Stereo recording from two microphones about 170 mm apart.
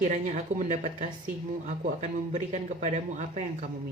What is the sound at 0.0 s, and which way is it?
Speech, 45° right (ahead or behind).